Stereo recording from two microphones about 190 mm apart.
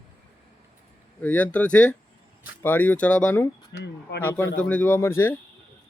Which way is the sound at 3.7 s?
65° left (ahead or behind).